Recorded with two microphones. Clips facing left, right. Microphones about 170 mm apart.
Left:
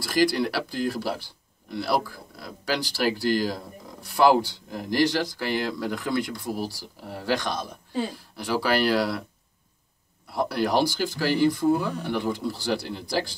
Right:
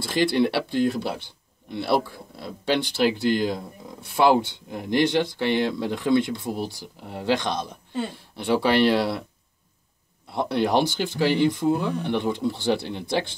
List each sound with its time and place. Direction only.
0.0 s speech: 25° right (ahead or behind)
7.9 s speech: centre (ahead or behind)
8.2 s speech: 25° right (ahead or behind)
10.3 s speech: 25° right (ahead or behind)